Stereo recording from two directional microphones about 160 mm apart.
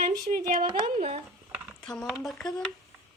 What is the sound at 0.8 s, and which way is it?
Speech, 50° right (ahead or behind).